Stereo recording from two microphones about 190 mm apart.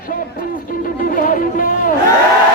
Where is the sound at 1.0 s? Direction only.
45° left (ahead or behind).